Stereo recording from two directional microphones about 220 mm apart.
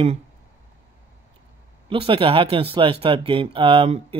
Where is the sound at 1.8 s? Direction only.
25° right (ahead or behind).